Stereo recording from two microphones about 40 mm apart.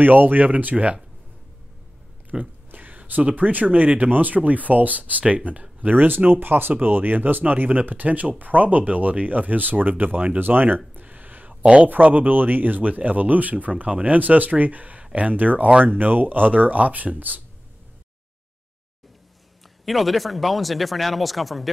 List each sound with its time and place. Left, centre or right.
0.0 s speech: right
2.3 s speech: centre
2.7 s a sound: right
3.3 s speech: right
11.0 s a sound: right
11.6 s a man's voice: right
11.9 s speech: right
19.8 s speech: centre